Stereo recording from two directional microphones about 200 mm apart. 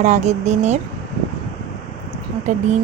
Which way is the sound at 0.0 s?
35° right (ahead or behind).